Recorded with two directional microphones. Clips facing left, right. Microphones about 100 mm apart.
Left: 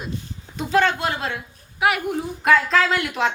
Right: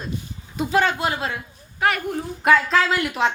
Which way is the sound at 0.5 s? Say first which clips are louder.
Left 1 dB; 5° right (ahead or behind).